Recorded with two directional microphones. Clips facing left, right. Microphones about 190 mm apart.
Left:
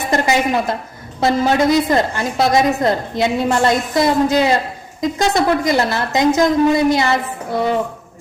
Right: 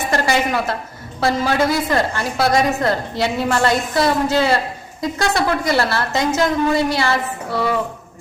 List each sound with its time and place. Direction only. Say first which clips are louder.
0.1 s a woman's voice: left 3 dB; 20° left (ahead or behind)